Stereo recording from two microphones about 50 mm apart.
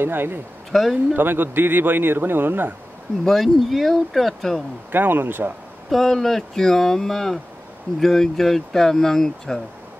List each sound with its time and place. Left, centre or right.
0.0 s a man's voice: right
0.7 s speech: centre
1.1 s a man's voice: right
3.3 s speech: centre
4.9 s a man's voice: right
5.9 s speech: centre